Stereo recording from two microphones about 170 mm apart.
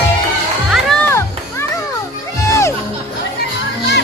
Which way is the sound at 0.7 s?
Centre (ahead or behind).